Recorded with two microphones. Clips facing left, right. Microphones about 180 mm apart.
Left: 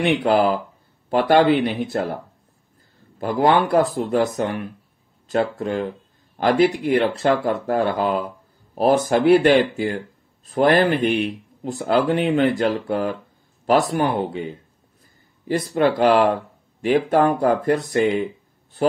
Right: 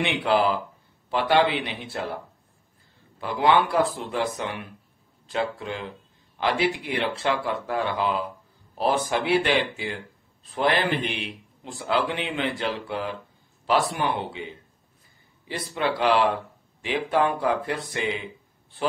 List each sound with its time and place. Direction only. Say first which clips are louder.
0.0 s speech: left 5 dB; 40° left (ahead or behind)
3.2 s speech: left 4 dB; 45° left (ahead or behind)